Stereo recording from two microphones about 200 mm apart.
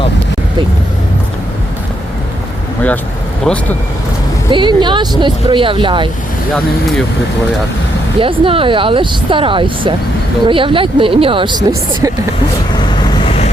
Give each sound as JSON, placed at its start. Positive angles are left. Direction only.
{"t": 3.4, "sound": "speech", "side_deg": 5}
{"t": 4.5, "sound": "speech", "side_deg": -25}
{"t": 8.2, "sound": "speech", "side_deg": -25}
{"t": 12.7, "sound": "vehicle", "side_deg": 25}